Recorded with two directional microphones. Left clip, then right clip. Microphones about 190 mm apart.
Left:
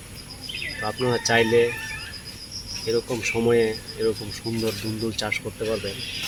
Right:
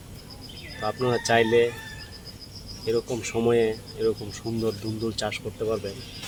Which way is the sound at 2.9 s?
10° right (ahead or behind).